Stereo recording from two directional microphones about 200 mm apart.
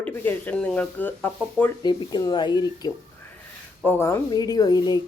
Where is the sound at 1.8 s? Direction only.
20° left (ahead or behind).